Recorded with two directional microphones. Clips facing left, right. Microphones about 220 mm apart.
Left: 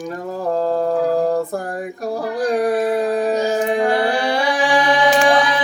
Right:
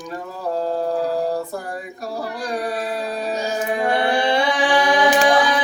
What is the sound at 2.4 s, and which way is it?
Speech, 50° left (ahead or behind).